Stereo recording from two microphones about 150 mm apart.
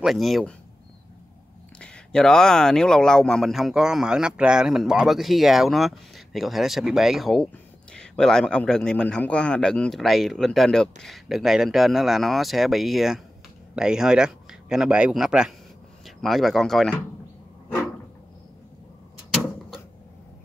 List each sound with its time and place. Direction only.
0.0 s speech: centre (ahead or behind)
1.8 s speech: 5° left (ahead or behind)